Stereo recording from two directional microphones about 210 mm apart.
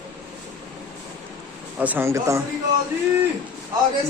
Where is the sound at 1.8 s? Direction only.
10° right (ahead or behind).